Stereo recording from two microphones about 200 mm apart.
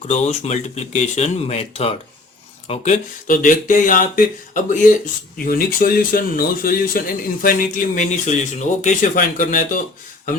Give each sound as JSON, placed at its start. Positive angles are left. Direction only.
{"t": 0.1, "sound": "speech", "side_deg": 35}